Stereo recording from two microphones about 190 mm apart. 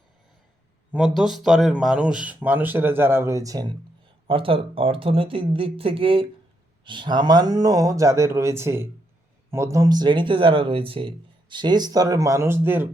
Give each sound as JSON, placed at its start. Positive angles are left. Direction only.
{"t": 0.9, "sound": "speech", "side_deg": 0}